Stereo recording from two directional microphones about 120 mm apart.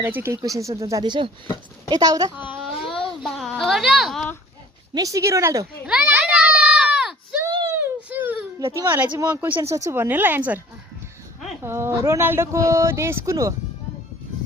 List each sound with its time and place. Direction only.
0.0 s speech: 20° right (ahead or behind)
1.0 s a woman's voice: 40° right (ahead or behind)
3.2 s a sound: centre (ahead or behind)
3.6 s speech: centre (ahead or behind)
4.9 s speech: 30° right (ahead or behind)
5.8 s a sound: 10° right (ahead or behind)
7.4 s a sound: 35° right (ahead or behind)
7.8 s baby cry: 15° right (ahead or behind)
8.7 s speech: 20° right (ahead or behind)
11.6 s speech: 20° right (ahead or behind)